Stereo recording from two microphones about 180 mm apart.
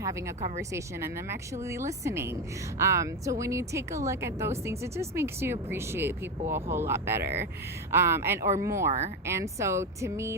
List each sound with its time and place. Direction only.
0.7 s speech: 15° right (ahead or behind)